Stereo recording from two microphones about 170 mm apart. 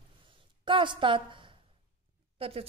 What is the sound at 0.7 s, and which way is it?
A woman's voice, 30° right (ahead or behind).